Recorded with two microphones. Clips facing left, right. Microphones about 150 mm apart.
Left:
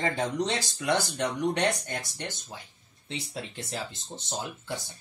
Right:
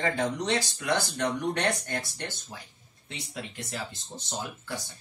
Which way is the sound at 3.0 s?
30° left (ahead or behind).